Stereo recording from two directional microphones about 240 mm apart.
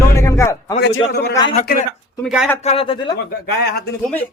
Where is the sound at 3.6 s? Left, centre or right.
Left.